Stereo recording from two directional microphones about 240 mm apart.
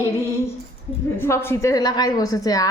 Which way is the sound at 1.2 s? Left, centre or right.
Centre.